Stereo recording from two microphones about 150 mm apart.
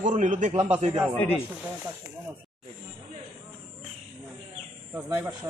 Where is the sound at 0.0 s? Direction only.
55° right (ahead or behind).